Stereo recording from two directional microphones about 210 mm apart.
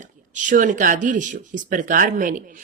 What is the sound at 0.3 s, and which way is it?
Speech, 40° right (ahead or behind).